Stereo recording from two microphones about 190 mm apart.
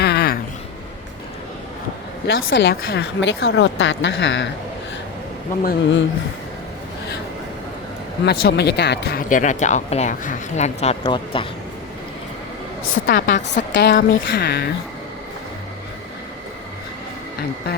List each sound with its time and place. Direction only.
0.0 s a sound: 60° left (ahead or behind)
2.2 s speech: 65° left (ahead or behind)
5.6 s speech: 70° left (ahead or behind)
8.2 s speech: 60° left (ahead or behind); by 11.4 s 30° left (ahead or behind)
12.8 s a woman's voice: 85° left
13.6 s a sound: 60° left (ahead or behind)
13.9 s speech: 55° left (ahead or behind)